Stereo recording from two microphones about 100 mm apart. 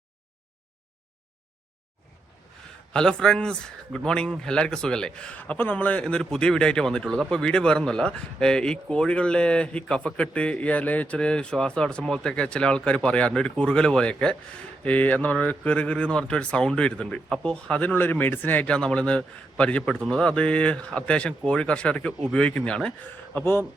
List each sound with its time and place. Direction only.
2.9 s speech: 5° left (ahead or behind)
23.3 s speech: 20° left (ahead or behind)